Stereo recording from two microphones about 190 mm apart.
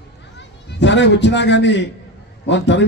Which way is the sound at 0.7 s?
70° left (ahead or behind).